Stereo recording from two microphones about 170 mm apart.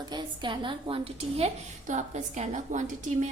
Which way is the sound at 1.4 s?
45° right (ahead or behind).